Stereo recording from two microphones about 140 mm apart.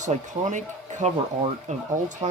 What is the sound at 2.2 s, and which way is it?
Speech, 45° right (ahead or behind).